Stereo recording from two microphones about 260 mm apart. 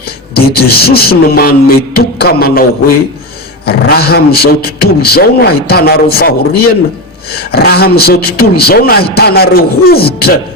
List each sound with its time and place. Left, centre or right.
0.3 s a man's voice: left